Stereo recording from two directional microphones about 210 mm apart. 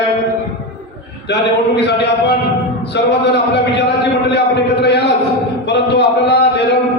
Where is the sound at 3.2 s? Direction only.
55° left (ahead or behind).